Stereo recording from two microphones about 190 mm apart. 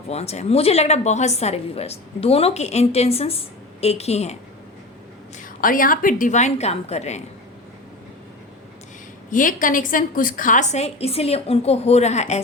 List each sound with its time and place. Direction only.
0.1 s a woman's voice: 35° left (ahead or behind)
5.4 s a woman's voice: 45° left (ahead or behind)
9.3 s a woman's voice: 45° left (ahead or behind)